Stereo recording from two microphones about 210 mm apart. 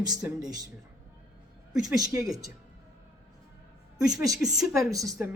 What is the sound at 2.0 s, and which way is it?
Speech, 15° right (ahead or behind).